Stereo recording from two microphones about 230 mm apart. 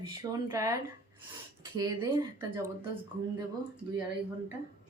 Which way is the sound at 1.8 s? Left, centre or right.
Centre.